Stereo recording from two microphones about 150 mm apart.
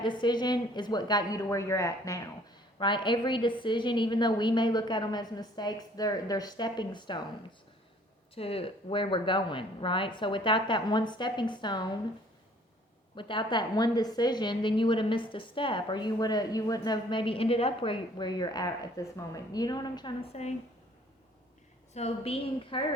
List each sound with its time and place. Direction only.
0.0 s a woman's voice: 30° left (ahead or behind)
8.4 s a woman's voice: 40° left (ahead or behind)
13.1 s a woman's voice: 35° left (ahead or behind)
20.3 s a woman's voice: 45° left (ahead or behind)
21.9 s a woman's voice: 45° left (ahead or behind)